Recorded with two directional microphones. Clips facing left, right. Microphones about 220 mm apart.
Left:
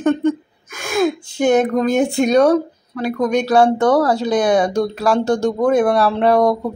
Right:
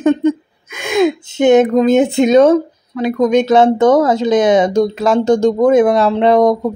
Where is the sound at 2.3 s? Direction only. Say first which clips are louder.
Right 4 dB; 20° right (ahead or behind).